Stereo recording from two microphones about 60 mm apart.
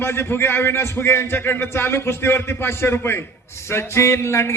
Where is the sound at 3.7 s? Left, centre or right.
Left.